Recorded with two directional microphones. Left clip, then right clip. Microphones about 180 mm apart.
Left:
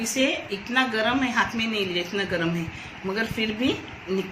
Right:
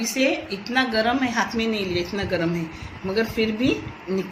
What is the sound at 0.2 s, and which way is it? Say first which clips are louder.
Speech: right 2 dB; 40° right (ahead or behind).